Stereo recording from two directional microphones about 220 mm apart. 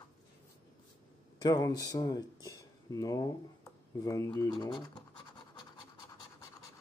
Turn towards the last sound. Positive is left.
turn(degrees=20)  # may be behind; listen again after turning